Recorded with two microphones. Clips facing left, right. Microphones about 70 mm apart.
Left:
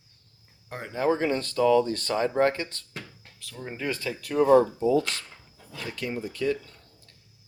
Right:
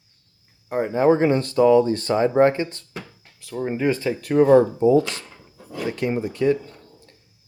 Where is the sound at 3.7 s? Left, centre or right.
Right.